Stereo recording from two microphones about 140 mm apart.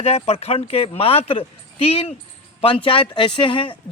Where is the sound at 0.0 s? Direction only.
45° left (ahead or behind).